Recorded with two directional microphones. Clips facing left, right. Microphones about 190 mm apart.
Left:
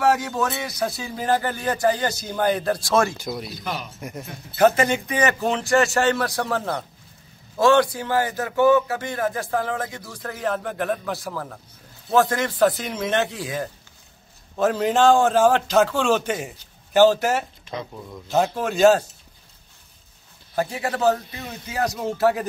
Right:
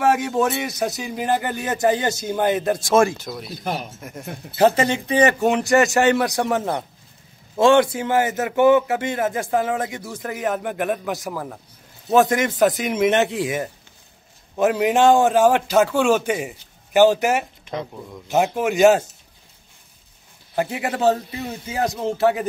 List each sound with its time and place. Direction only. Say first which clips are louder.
0.0 s a man's voice: right 2 dB; 25° right (ahead or behind)
3.6 s speech: right 6 dB; 45° right (ahead or behind)
4.6 s a man's voice: right 1 dB; 25° right (ahead or behind)
5.7 s a man's voice: right 2 dB; 15° right (ahead or behind)
14.6 s a man's voice: right 2 dB; 15° right (ahead or behind)
20.5 s a man's voice: right 1 dB; 20° right (ahead or behind)